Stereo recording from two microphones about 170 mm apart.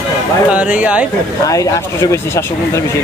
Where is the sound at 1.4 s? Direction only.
20° left (ahead or behind).